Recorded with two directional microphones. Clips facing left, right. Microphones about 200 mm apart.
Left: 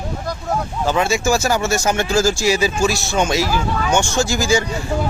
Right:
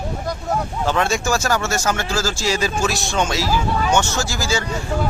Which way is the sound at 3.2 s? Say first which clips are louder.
Left 2 dB; 15° left (ahead or behind).